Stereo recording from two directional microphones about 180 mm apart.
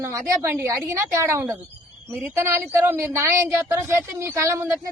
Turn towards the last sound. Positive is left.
turn(degrees=-15)  # may be behind; listen again after turning